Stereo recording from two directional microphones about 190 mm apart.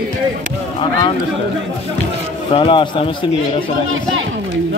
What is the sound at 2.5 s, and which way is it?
Speech, 30° left (ahead or behind).